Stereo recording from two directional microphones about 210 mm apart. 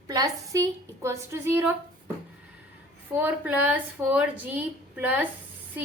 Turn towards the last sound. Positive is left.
turn(degrees=-10)  # may be behind; listen again after turning